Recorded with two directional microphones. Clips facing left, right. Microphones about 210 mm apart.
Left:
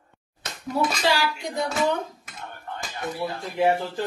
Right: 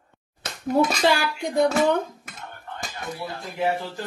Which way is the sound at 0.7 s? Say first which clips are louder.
Right 4 dB; 55° right (ahead or behind).